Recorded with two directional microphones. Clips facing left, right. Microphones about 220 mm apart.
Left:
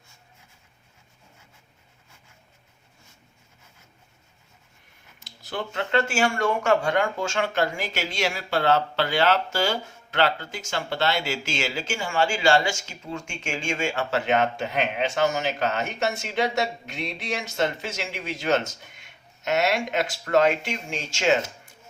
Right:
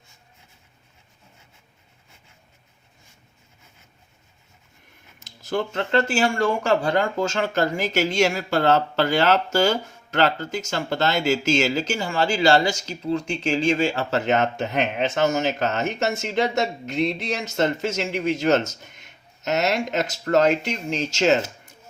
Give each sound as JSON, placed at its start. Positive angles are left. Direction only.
{"t": 5.4, "sound": "speech", "side_deg": -45}